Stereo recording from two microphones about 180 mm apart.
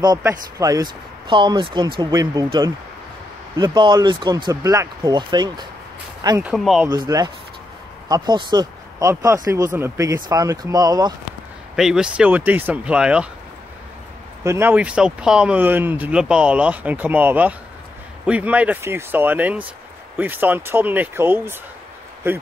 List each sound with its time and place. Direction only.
0.0 s speech: 20° right (ahead or behind)
6.4 s speech: centre (ahead or behind)
6.9 s speech: 20° right (ahead or behind)
11.7 s speech: 5° right (ahead or behind)
14.4 s speech: 15° right (ahead or behind)